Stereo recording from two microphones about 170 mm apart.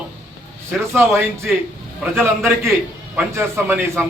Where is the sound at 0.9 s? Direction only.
10° right (ahead or behind).